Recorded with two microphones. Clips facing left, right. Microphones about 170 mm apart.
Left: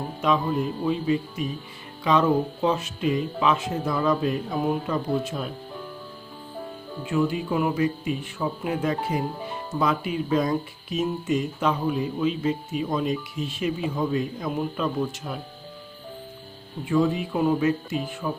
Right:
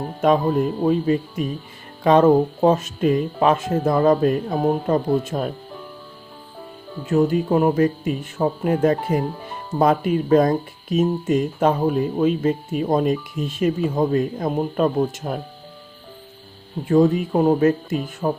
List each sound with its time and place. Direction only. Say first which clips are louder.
0.2 s speech: right 6 dB; 45° right (ahead or behind)
7.1 s speech: right 7 dB; 45° right (ahead or behind)
16.9 s speech: right 6 dB; 45° right (ahead or behind)